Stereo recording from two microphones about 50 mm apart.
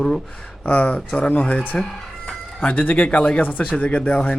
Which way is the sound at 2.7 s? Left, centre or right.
Left.